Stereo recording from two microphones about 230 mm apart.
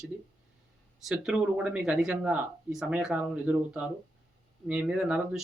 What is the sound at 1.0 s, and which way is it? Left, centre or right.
Speech, centre.